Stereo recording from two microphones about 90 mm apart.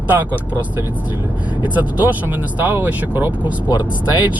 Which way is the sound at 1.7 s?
20° right (ahead or behind).